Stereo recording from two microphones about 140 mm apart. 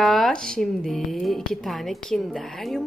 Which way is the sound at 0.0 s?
Centre (ahead or behind).